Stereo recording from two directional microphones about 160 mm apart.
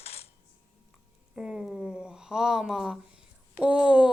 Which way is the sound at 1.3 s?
5° right (ahead or behind).